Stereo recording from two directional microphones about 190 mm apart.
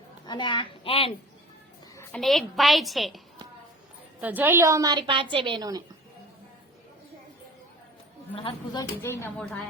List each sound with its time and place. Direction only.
0.3 s a child's voice: 25° left (ahead or behind)
2.1 s a woman's voice: centre (ahead or behind)
4.2 s a woman's voice: 10° right (ahead or behind)
8.4 s speech: 25° left (ahead or behind)